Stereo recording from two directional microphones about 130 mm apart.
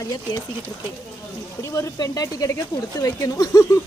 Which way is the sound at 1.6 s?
25° left (ahead or behind).